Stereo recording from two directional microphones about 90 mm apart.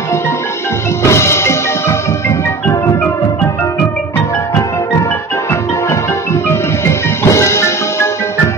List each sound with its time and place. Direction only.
1.0 s music: 30° left (ahead or behind)
6.5 s music: 30° left (ahead or behind)